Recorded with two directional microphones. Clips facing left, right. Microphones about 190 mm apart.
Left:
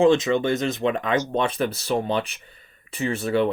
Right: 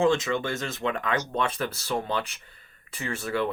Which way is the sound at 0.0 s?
20° left (ahead or behind).